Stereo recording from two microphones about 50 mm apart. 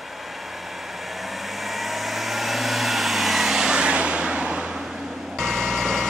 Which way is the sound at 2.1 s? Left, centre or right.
Centre.